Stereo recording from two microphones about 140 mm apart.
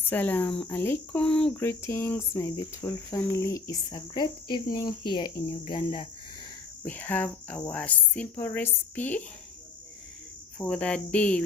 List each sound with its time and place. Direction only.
0.1 s a woman's voice: 15° left (ahead or behind); by 6.1 s 35° left (ahead or behind)
6.8 s a woman's voice: 10° left (ahead or behind)
10.6 s a woman's voice: 10° left (ahead or behind)